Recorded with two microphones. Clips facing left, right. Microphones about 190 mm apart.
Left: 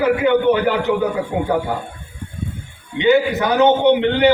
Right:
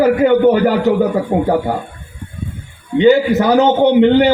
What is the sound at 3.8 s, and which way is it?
Speech, 45° right (ahead or behind).